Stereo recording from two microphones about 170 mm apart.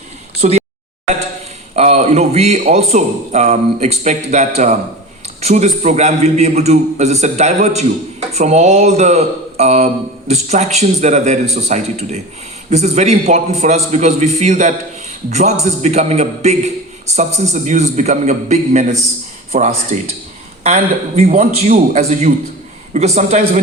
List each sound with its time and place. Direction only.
0.4 s a man's voice: 45° right (ahead or behind)
1.7 s a man's voice: 40° right (ahead or behind)